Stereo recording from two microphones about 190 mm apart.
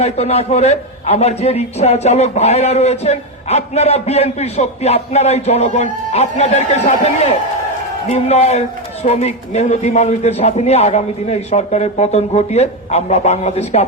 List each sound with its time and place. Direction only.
0.0 s a man's voice: 35° left (ahead or behind)